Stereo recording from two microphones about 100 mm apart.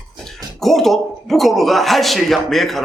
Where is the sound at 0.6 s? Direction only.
Centre (ahead or behind).